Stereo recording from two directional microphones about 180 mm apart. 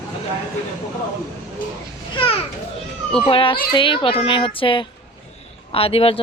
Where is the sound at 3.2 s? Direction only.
30° left (ahead or behind).